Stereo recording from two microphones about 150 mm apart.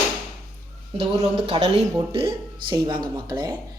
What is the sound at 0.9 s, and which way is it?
A woman's voice, 40° right (ahead or behind).